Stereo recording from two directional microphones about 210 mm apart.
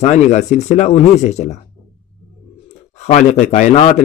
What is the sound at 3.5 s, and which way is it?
Speech, 35° left (ahead or behind).